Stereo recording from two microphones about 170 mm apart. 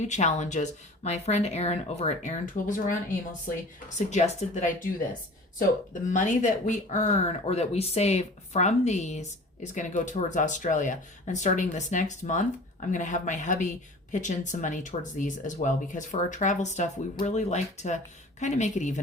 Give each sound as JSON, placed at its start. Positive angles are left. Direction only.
{"t": 0.1, "sound": "speech", "side_deg": 45}